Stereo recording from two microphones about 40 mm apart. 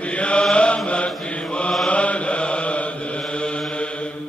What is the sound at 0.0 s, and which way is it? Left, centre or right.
Mantra, left.